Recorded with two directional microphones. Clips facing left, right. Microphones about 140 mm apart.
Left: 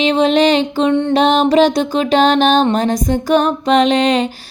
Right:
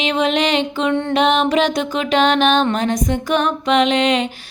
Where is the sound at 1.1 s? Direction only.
35° left (ahead or behind).